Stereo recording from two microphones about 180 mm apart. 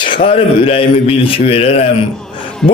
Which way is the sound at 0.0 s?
30° left (ahead or behind).